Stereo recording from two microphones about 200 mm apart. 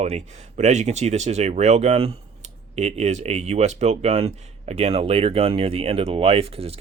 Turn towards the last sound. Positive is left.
turn(degrees=-30)  # may be behind; listen again after turning